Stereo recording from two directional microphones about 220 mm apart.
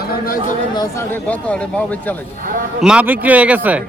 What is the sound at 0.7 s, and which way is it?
Speech, 15° left (ahead or behind).